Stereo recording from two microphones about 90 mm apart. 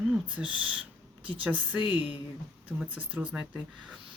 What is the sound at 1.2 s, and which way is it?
Speech, 75° right (ahead or behind).